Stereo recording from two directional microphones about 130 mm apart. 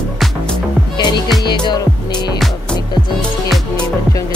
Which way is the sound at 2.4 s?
5° left (ahead or behind).